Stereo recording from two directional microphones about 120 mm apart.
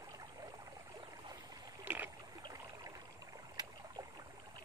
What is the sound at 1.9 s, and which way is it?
Rowboat, 15° right (ahead or behind).